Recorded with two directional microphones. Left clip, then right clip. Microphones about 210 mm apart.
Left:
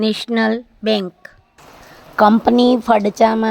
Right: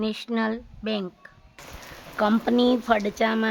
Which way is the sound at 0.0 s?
30° left (ahead or behind).